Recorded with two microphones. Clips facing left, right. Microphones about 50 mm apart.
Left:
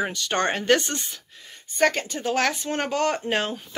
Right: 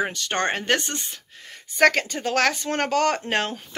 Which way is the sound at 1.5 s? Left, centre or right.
Right.